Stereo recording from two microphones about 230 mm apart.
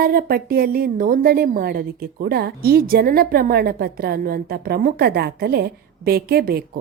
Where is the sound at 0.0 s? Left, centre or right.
Right.